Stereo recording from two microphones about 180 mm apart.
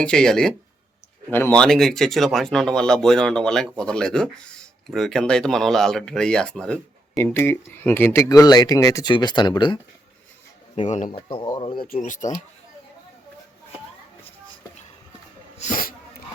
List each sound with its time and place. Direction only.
0.0 s speech: 5° left (ahead or behind); by 9.7 s 25° left (ahead or behind)
10.8 s speech: 40° left (ahead or behind)
12.0 s speech: 45° left (ahead or behind)
15.5 s sneeze: 45° left (ahead or behind)